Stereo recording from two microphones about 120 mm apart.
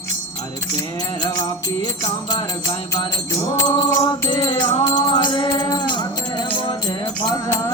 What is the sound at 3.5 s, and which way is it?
Music, 35° left (ahead or behind).